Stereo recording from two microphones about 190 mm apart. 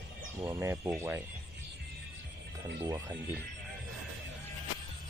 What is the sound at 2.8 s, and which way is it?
Speech, 20° right (ahead or behind).